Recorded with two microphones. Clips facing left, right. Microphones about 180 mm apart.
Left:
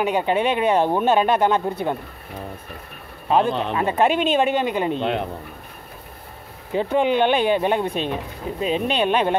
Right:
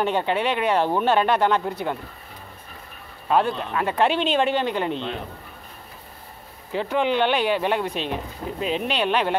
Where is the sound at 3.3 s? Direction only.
20° left (ahead or behind).